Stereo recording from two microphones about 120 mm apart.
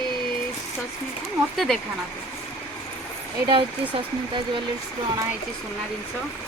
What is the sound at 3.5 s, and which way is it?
Speech, 45° right (ahead or behind).